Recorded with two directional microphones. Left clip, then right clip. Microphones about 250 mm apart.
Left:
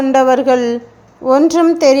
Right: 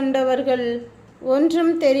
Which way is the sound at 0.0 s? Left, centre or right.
Left.